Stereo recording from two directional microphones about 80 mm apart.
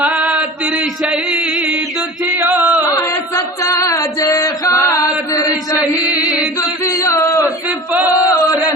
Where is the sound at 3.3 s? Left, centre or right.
Left.